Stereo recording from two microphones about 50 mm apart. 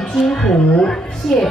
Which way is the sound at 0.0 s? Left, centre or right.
Centre.